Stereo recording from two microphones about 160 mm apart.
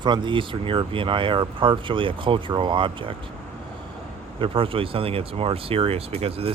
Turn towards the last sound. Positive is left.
turn(degrees=-35)  # may be behind; listen again after turning